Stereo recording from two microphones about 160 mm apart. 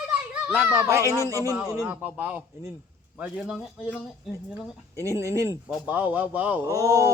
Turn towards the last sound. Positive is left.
turn(degrees=-20)  # may be behind; listen again after turning